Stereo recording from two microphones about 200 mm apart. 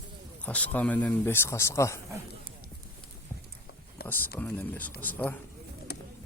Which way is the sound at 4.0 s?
50° left (ahead or behind).